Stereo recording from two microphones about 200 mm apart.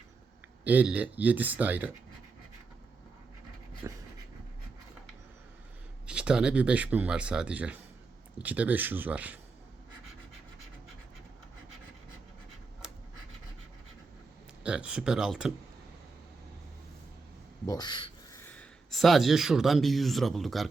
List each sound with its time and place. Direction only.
0.6 s speech: 10° right (ahead or behind)
3.8 s speech: 15° right (ahead or behind)
6.1 s speech: 5° right (ahead or behind)
14.6 s speech: 5° right (ahead or behind)
17.7 s a sound: 20° left (ahead or behind)
18.4 s speech: 5° left (ahead or behind)